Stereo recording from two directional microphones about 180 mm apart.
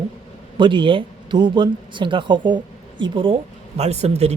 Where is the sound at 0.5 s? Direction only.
25° right (ahead or behind).